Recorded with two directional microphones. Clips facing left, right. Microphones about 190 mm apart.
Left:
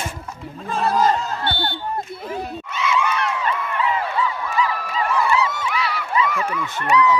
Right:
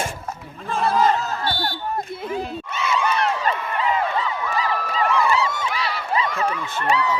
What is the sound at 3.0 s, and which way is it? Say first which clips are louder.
Crowd: right 2 dB; 35° right (ahead or behind).